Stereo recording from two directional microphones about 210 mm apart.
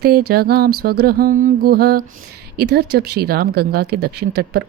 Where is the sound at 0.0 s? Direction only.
50° right (ahead or behind).